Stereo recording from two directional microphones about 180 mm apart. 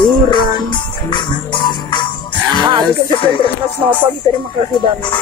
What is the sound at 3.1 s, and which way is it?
Speech, 30° left (ahead or behind).